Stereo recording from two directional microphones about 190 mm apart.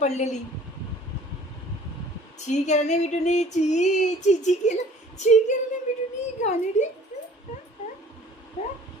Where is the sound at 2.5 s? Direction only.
40° left (ahead or behind).